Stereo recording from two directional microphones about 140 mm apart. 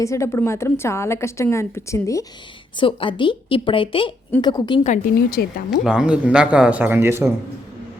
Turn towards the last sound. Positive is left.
turn(degrees=-15)  # may be behind; listen again after turning